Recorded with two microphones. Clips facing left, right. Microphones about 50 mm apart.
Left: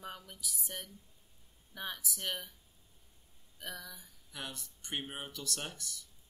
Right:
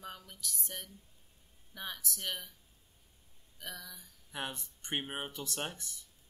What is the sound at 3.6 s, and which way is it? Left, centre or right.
Speech, centre.